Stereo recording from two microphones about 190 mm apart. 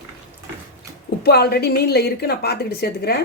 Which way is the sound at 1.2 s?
55° left (ahead or behind).